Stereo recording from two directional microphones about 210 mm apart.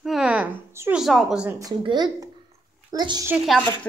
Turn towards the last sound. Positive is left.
turn(degrees=0)  # may be behind; listen again after turning